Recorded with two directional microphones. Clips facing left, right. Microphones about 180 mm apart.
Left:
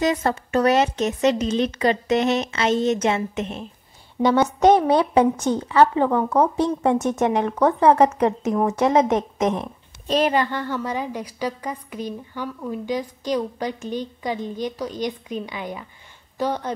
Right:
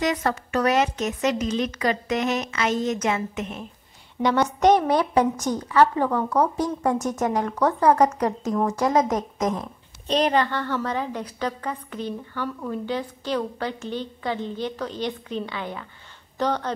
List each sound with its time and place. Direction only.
0.0 s a woman's voice: 25° left (ahead or behind)
10.0 s a woman's voice: 5° left (ahead or behind)